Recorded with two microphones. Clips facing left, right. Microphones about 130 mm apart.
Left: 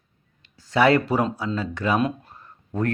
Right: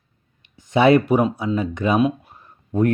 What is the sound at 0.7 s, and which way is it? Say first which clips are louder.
Speech: right 4 dB; 20° right (ahead or behind).